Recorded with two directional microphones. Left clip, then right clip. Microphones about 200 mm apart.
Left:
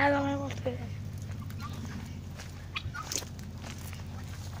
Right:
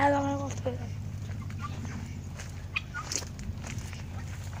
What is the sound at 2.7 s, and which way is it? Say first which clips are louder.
Fowl: right 3 dB; centre (ahead or behind).